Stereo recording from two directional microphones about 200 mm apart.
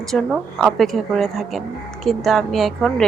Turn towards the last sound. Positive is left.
turn(degrees=0)  # may be behind; listen again after turning